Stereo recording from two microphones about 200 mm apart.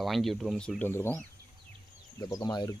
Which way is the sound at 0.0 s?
Centre (ahead or behind).